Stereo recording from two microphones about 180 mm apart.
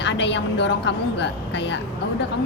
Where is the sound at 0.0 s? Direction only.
80° left.